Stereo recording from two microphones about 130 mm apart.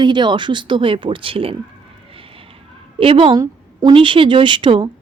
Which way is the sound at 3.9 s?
40° right (ahead or behind).